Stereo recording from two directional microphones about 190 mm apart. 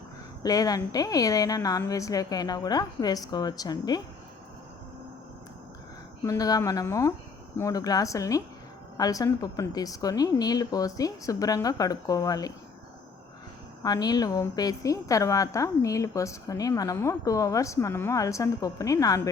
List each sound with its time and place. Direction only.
0.4 s a woman's voice: 20° left (ahead or behind)
6.2 s a woman's voice: 20° left (ahead or behind)
13.8 s a woman's voice: 20° left (ahead or behind)